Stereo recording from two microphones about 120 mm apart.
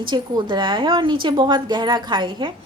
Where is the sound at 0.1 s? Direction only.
40° right (ahead or behind).